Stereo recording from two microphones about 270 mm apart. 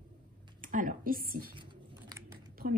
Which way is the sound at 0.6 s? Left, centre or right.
Right.